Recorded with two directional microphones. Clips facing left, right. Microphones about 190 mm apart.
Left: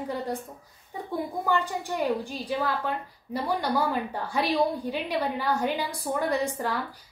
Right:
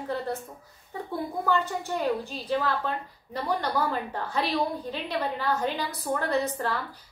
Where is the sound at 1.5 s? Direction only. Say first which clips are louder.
Right 1 dB; 15° left (ahead or behind).